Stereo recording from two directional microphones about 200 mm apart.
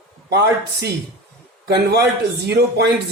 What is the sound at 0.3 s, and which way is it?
Speech, 55° right (ahead or behind).